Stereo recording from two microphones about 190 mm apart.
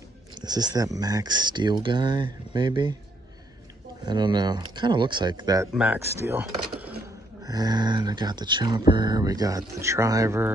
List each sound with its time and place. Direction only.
0.3 s speech: 20° right (ahead or behind)
4.0 s speech: 25° right (ahead or behind)